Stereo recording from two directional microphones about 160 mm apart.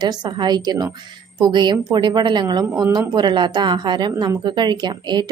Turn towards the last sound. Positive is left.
turn(degrees=-25)  # may be behind; listen again after turning